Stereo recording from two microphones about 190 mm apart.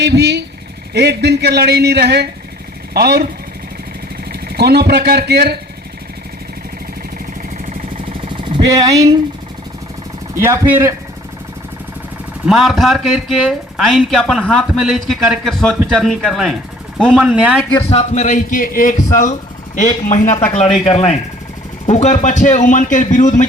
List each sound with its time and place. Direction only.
0.0 s speech: 60° right (ahead or behind)
4.3 s speech: 55° right (ahead or behind)
8.4 s speech: 25° right (ahead or behind)
10.3 s speech: 15° right (ahead or behind)
12.5 s speech: centre (ahead or behind)
17.6 s speech: 10° left (ahead or behind)
17.8 s a man's voice: 35° left (ahead or behind)